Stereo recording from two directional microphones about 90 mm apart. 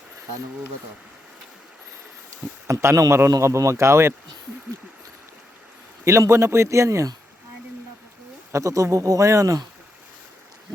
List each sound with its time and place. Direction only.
2.6 s a man's voice: 35° right (ahead or behind)
6.1 s a man's voice: 30° right (ahead or behind)
8.5 s a man's voice: 35° right (ahead or behind)